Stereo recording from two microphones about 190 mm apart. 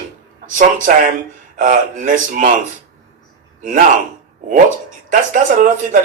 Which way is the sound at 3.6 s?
45° right (ahead or behind).